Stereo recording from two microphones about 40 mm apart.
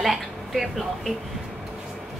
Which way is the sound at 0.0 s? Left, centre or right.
Centre.